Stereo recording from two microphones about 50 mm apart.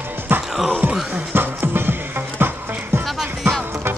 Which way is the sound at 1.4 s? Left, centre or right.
Right.